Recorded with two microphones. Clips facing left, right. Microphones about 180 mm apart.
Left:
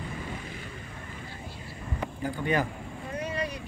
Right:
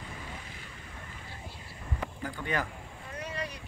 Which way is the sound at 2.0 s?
15° left (ahead or behind).